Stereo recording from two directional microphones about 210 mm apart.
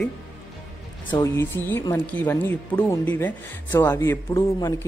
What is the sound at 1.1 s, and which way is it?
Speech, 15° left (ahead or behind).